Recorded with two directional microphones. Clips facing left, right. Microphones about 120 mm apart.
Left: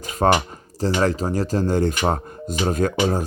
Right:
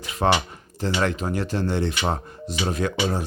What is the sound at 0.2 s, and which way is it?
Speech, 45° left (ahead or behind).